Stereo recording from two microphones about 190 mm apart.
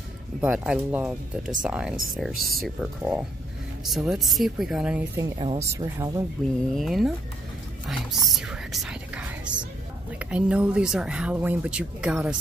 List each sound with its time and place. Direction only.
0.4 s speech: 5° right (ahead or behind)
5.2 s speech: 25° right (ahead or behind)
5.6 s speech: 15° right (ahead or behind)
6.7 s speech: centre (ahead or behind)
8.1 s speech: centre (ahead or behind)